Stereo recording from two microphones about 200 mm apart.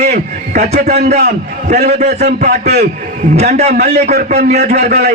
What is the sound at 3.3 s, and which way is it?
Speech, 35° right (ahead or behind).